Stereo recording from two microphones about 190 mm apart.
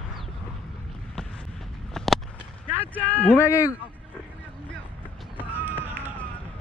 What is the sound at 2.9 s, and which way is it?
Speech, 5° left (ahead or behind).